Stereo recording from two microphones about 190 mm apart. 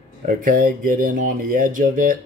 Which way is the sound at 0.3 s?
45° right (ahead or behind).